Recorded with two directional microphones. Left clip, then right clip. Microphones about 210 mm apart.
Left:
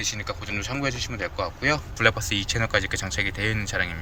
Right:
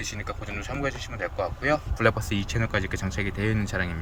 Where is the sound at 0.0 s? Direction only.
20° right (ahead or behind).